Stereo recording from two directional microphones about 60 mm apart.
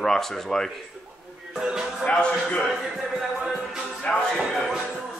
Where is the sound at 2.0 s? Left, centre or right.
Centre.